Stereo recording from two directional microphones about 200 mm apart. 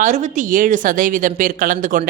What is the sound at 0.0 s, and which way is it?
Speech, 40° right (ahead or behind).